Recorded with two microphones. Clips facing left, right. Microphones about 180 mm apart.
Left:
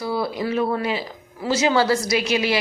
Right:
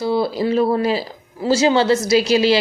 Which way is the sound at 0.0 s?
25° right (ahead or behind).